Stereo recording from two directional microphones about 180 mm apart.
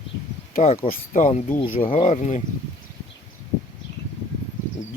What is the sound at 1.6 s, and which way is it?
Speech, 30° left (ahead or behind).